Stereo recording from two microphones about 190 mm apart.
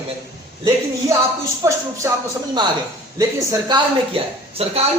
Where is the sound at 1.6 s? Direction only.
15° right (ahead or behind).